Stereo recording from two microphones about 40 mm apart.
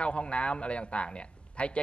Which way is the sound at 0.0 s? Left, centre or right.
Left.